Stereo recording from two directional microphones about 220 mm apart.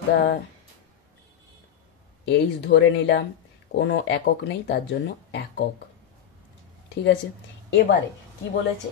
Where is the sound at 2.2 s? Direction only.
50° left (ahead or behind).